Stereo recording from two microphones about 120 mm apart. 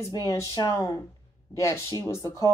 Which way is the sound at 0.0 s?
30° left (ahead or behind).